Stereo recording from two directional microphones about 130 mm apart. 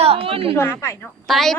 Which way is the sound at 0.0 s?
45° right (ahead or behind).